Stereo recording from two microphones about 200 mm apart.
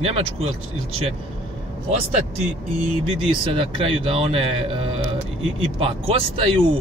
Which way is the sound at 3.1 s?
25° right (ahead or behind).